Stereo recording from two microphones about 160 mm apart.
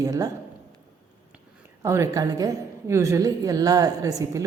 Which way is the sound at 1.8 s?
20° right (ahead or behind).